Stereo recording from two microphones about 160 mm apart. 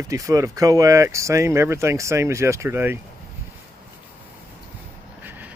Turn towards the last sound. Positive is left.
turn(degrees=-10)  # may be behind; listen again after turning